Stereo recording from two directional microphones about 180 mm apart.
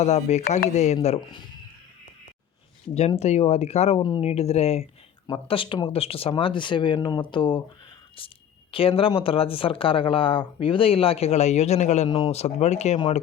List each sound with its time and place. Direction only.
0.0 s speech: 40° left (ahead or behind)
3.2 s speech: 35° left (ahead or behind)